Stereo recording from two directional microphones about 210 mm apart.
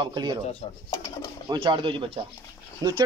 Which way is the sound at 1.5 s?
20° right (ahead or behind).